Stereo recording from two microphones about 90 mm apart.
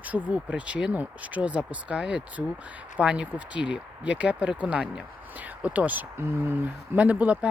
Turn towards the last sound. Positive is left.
turn(degrees=-15)  # may be behind; listen again after turning